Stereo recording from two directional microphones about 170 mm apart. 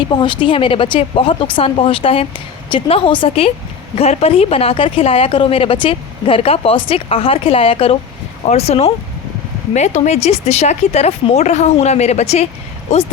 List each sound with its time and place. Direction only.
0.2 s speech: 30° left (ahead or behind)